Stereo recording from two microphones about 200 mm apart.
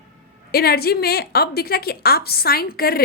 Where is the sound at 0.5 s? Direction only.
50° left (ahead or behind).